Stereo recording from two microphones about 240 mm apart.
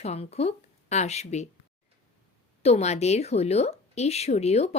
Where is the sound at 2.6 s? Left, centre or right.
Left.